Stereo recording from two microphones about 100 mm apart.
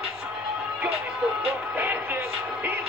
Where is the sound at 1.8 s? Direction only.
20° right (ahead or behind).